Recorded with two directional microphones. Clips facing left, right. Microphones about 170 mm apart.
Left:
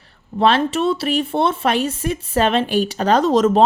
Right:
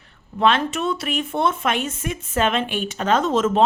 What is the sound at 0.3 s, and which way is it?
Speech, 35° left (ahead or behind).